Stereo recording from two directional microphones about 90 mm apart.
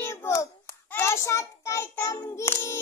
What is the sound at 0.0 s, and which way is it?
Hands, 25° left (ahead or behind).